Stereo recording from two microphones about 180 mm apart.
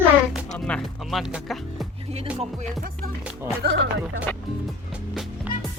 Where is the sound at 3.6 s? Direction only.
65° right (ahead or behind).